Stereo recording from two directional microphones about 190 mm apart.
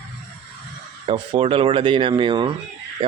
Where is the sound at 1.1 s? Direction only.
25° right (ahead or behind).